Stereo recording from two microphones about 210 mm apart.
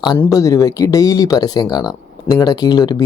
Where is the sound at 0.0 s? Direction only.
15° left (ahead or behind).